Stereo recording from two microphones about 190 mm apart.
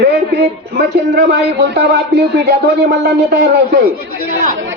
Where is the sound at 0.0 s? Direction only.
60° right (ahead or behind).